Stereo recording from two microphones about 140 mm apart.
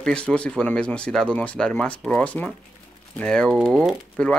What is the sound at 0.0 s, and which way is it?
Speech, 5° left (ahead or behind).